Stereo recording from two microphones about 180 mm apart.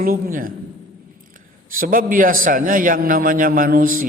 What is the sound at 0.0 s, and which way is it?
Speech, 55° right (ahead or behind).